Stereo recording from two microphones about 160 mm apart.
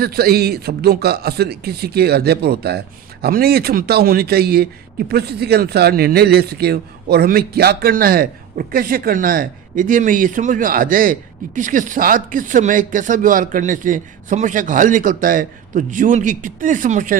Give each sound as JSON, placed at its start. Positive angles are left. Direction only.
{"t": 0.0, "sound": "a man's voice", "side_deg": -75}